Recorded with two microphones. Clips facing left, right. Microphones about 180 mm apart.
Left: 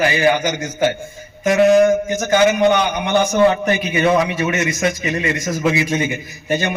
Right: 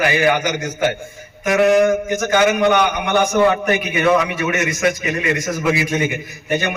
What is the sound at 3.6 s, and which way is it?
A man's voice, 30° left (ahead or behind).